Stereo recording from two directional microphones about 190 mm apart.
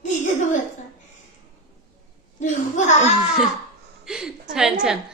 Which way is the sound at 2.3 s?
40° left (ahead or behind).